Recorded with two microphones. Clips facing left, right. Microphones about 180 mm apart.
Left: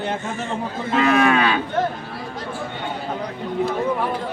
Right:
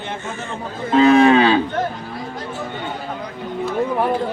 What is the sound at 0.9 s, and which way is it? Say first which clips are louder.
Moo: right 6 dB; 30° right (ahead or behind).